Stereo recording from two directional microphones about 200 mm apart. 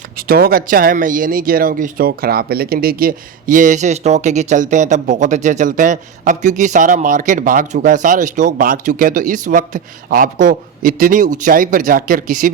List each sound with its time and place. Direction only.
0.2 s a man's voice: 50° right (ahead or behind)